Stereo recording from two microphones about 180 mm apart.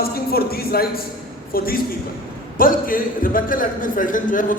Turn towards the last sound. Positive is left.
turn(degrees=45)  # may be behind; listen again after turning